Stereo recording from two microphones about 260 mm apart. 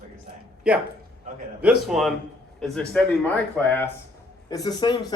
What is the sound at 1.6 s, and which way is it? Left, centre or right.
A man's voice, centre.